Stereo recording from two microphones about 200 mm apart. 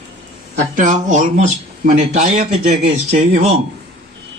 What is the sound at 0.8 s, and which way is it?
Speech, 40° right (ahead or behind).